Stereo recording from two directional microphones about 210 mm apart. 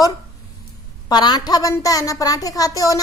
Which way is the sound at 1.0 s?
20° left (ahead or behind).